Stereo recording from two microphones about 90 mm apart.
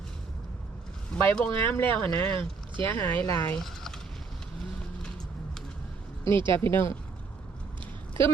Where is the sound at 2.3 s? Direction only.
70° right (ahead or behind).